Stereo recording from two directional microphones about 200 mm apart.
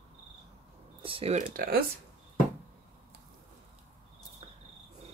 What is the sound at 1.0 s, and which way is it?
Speech, 25° right (ahead or behind).